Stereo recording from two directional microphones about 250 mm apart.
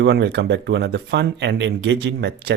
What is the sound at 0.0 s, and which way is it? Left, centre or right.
Speech, right.